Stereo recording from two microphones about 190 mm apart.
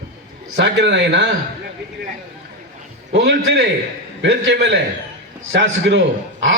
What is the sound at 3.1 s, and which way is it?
Speech, 65° right (ahead or behind).